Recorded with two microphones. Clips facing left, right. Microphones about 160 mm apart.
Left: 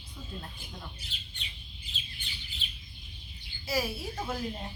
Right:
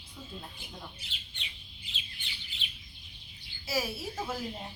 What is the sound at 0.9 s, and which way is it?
Speech, 40° left (ahead or behind).